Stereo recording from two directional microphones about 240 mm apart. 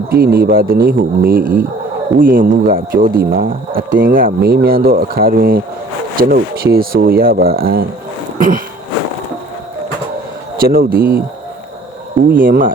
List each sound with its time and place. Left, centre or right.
0.1 s speech: right
8.4 s a sound: right
10.6 s speech: right
12.3 s speech: right